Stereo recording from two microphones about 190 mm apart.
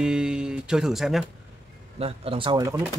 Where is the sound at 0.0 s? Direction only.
5° right (ahead or behind).